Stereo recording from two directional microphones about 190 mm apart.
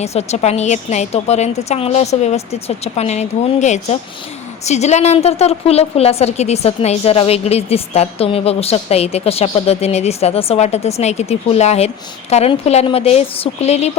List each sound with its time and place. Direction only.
0.0 s a woman's voice: 35° left (ahead or behind)